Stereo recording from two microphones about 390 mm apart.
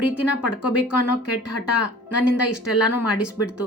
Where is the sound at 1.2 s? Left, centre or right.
Left.